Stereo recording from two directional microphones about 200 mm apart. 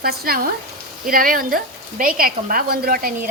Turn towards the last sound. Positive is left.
turn(degrees=-45)  # may be behind; listen again after turning